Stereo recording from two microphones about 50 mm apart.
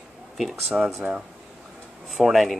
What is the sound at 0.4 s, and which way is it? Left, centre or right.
Speech, centre.